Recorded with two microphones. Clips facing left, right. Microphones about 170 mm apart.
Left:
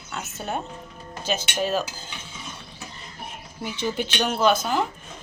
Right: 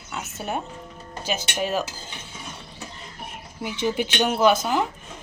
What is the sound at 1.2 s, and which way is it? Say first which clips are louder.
Speech: left 1 dB; 10° right (ahead or behind).